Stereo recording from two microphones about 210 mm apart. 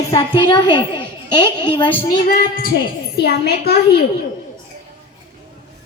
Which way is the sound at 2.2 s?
45° left (ahead or behind).